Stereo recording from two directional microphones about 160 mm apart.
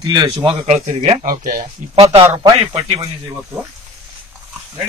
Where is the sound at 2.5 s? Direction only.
35° right (ahead or behind).